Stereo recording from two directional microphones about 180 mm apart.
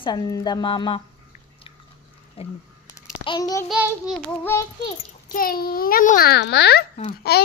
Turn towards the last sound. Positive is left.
turn(degrees=60)  # may be behind; listen again after turning